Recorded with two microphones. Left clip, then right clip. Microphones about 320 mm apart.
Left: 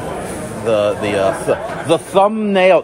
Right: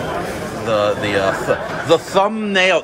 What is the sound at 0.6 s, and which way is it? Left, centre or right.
A man's voice, centre.